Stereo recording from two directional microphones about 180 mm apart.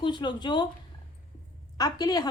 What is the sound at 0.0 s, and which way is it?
Speech, 25° left (ahead or behind).